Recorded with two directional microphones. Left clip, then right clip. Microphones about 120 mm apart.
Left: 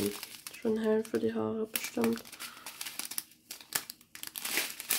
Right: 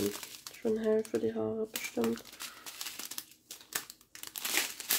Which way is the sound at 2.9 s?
20° left (ahead or behind).